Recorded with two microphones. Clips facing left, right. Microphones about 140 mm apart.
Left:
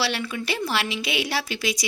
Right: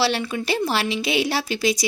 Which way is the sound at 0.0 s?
30° right (ahead or behind).